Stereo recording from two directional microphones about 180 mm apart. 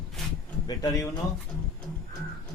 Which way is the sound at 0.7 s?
20° left (ahead or behind).